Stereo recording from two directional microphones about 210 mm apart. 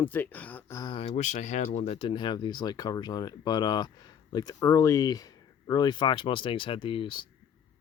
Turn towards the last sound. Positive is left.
turn(degrees=25)  # may be behind; listen again after turning